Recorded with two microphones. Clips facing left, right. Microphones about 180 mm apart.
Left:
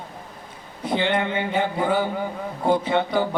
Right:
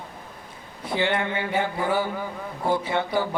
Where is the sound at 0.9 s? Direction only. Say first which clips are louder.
Left 2 dB; 20° left (ahead or behind).